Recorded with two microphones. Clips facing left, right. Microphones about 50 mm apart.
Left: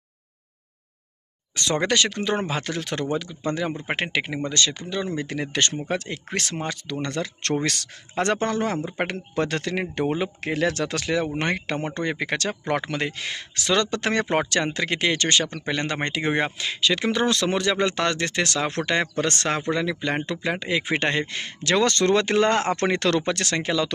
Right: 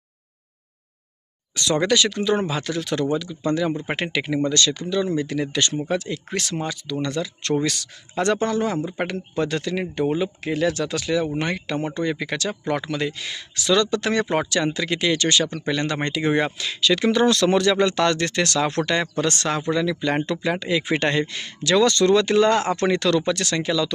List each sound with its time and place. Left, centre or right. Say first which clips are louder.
1.5 s speech: right 2 dB; left
9.3 s speech: right 1 dB; left